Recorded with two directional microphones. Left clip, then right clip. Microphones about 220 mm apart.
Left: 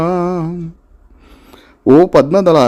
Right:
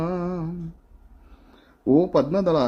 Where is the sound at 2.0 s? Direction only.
35° left (ahead or behind).